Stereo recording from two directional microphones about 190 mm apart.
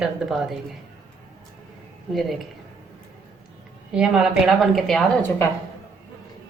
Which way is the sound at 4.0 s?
5° right (ahead or behind).